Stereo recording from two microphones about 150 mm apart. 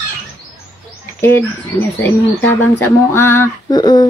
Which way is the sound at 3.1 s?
15° left (ahead or behind).